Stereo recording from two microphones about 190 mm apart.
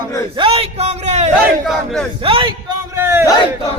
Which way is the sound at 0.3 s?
30° right (ahead or behind).